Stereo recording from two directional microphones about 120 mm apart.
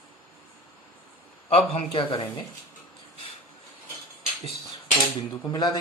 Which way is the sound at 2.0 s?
40° left (ahead or behind).